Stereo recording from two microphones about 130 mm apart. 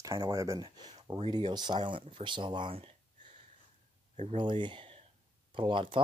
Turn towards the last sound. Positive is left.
turn(degrees=-40)  # may be behind; listen again after turning